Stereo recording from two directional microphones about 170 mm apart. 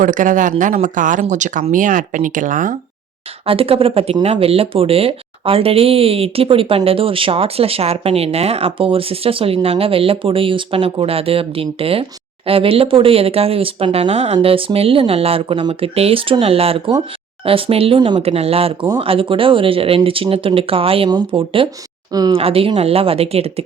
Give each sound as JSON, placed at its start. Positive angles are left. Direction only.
{"t": 0.0, "sound": "speech", "side_deg": -50}
{"t": 3.4, "sound": "speech", "side_deg": -35}
{"t": 22.4, "sound": "speech", "side_deg": -35}